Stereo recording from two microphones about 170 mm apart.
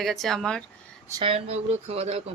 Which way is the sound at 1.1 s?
30° right (ahead or behind).